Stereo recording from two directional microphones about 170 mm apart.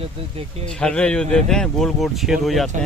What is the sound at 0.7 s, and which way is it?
Speech, 5° left (ahead or behind).